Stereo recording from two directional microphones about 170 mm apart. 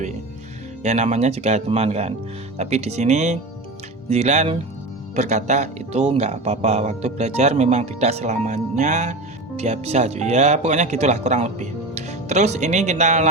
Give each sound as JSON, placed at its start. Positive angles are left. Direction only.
{"t": 0.8, "sound": "speech", "side_deg": -45}